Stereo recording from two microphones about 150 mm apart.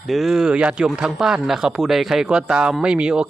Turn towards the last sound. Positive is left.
turn(degrees=-5)  # may be behind; listen again after turning